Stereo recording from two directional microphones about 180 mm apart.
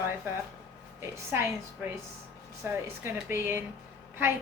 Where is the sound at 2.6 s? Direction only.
15° right (ahead or behind).